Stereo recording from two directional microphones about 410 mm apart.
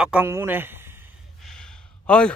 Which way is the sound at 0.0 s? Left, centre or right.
Centre.